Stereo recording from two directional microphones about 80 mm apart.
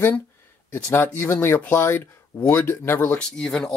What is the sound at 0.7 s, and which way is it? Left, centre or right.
Speech, left.